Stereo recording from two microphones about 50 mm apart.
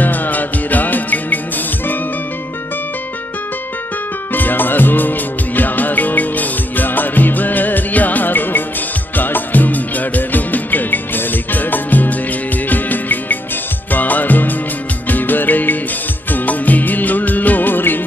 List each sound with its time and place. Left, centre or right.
0.0 s music: left
4.3 s music: left
16.3 s music of bollywood: left